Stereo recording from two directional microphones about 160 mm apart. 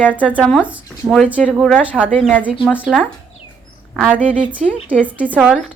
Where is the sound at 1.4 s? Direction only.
Centre (ahead or behind).